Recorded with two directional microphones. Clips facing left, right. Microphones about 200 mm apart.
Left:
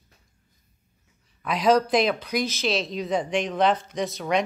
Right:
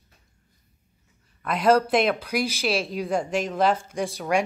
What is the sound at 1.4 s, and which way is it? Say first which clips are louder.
A woman's voice: right 1 dB; 5° right (ahead or behind).